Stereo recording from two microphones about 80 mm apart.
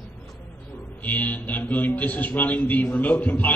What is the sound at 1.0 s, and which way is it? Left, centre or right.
A man's voice, left.